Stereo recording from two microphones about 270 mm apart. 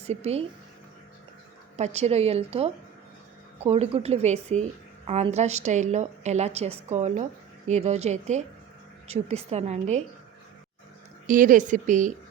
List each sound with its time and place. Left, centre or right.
0.0 s speech: right
1.7 s a woman's voice: right
11.3 s a woman's voice: right